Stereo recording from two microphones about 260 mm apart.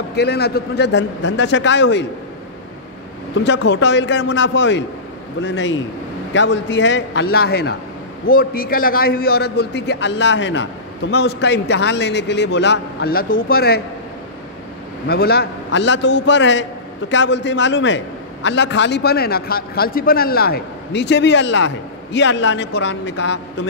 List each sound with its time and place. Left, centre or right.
0.1 s a man's voice: left
3.3 s a man's voice: left
15.0 s a man's voice: left